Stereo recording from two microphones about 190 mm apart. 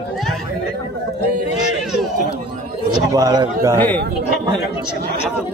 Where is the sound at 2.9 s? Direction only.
20° right (ahead or behind).